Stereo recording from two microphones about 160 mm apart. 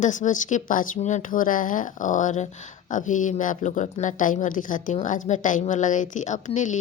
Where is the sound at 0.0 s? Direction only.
50° left (ahead or behind).